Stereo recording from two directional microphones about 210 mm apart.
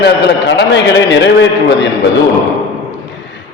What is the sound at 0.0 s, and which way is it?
A man's voice, 55° left (ahead or behind).